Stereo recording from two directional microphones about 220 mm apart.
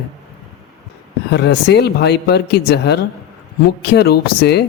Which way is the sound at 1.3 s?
50° left (ahead or behind).